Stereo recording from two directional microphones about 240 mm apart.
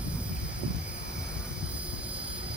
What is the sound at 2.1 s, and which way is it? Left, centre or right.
Vehicle, centre.